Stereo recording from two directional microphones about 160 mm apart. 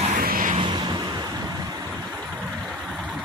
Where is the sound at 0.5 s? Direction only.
30° right (ahead or behind).